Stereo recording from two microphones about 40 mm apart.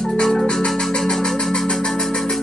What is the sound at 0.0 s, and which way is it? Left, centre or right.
Music, centre.